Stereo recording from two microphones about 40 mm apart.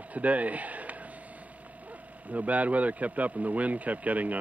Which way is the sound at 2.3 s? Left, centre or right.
Right.